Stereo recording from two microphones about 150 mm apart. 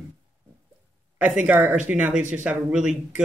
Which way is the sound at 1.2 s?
10° right (ahead or behind).